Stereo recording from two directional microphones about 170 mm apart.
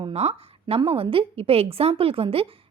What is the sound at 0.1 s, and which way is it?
A woman's voice, 40° right (ahead or behind).